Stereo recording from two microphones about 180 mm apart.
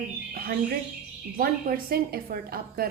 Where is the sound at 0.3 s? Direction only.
55° right (ahead or behind).